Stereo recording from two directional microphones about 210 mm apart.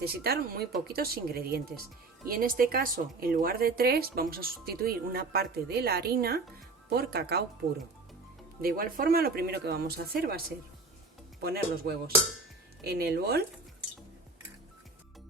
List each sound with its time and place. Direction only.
0.0 s speech: 50° right (ahead or behind)
8.6 s speech: 45° right (ahead or behind)